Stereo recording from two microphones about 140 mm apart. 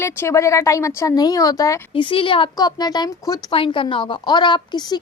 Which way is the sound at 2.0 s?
35° left (ahead or behind).